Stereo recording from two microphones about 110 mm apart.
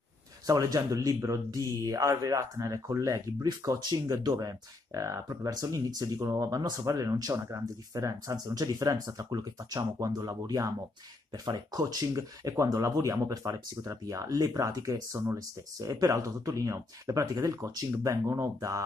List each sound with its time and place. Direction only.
0.5 s speech: 35° right (ahead or behind)